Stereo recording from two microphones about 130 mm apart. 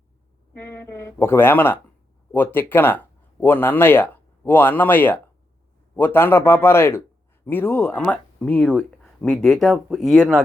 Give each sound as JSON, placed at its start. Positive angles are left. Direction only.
{"t": 0.5, "sound": "a man's voice", "side_deg": 20}